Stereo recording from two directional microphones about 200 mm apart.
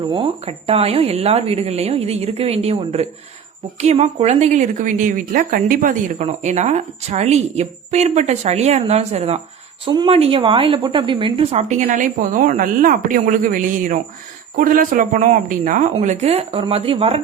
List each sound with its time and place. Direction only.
0.1 s a woman's voice: 30° right (ahead or behind)